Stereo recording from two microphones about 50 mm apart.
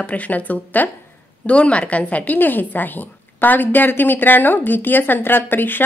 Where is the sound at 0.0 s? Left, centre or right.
Left.